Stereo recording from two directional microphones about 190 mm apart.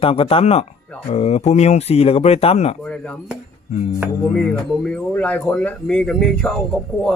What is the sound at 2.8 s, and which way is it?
Speech, 5° left (ahead or behind).